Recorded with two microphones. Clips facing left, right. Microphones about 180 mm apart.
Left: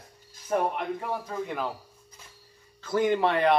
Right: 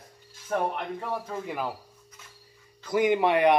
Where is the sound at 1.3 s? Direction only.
5° right (ahead or behind).